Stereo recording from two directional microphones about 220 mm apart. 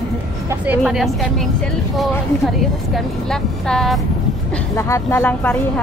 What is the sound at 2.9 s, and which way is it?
Speech, centre (ahead or behind).